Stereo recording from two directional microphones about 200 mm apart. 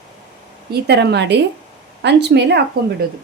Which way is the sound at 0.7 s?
55° right (ahead or behind).